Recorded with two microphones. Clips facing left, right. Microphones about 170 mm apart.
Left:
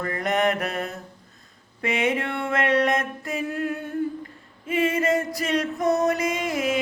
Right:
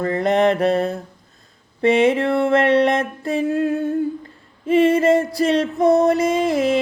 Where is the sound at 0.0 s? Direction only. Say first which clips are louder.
Right 7 dB; 30° right (ahead or behind).